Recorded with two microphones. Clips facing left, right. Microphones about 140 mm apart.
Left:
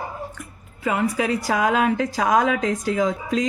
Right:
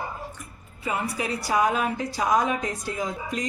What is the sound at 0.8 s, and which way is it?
A woman's voice, 90° left.